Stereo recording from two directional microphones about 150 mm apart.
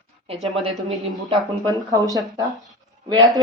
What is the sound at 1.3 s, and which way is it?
Speech, 30° right (ahead or behind).